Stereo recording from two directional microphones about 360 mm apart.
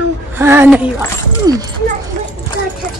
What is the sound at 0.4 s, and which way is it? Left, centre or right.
Speech, centre.